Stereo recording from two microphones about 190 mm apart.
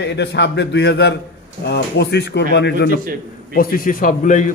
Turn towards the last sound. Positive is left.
turn(degrees=40)  # may be behind; listen again after turning